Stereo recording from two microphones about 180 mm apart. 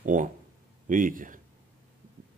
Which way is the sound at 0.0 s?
45° right (ahead or behind).